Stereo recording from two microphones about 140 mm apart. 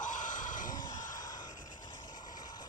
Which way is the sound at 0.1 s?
65° left (ahead or behind).